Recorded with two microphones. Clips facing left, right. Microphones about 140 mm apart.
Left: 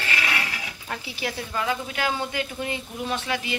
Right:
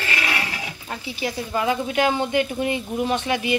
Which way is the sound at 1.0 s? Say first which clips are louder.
Right 5 dB; centre (ahead or behind).